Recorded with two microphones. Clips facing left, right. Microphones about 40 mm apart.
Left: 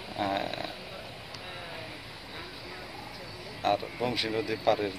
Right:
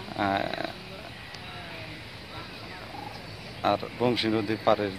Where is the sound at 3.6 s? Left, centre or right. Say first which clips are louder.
Right 3 dB; centre.